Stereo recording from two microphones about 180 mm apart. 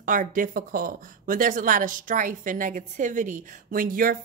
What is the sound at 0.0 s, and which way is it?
A woman's voice, 50° right (ahead or behind).